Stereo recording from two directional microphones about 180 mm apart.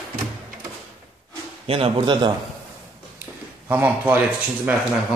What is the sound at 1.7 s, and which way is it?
Speech, 30° right (ahead or behind).